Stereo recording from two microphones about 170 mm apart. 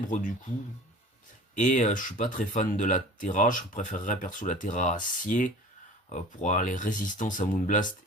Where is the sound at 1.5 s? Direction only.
45° left (ahead or behind).